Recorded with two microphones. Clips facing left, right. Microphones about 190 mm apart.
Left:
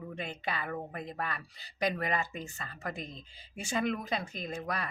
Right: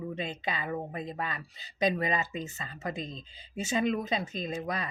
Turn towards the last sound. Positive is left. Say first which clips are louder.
# right 3 dB
turn(degrees=-20)  # may be behind; listen again after turning